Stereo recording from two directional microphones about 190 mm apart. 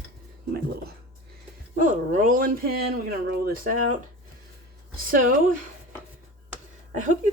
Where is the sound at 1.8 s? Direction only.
40° right (ahead or behind).